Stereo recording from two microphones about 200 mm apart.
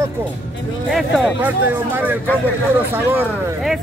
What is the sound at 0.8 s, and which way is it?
Speech, centre (ahead or behind).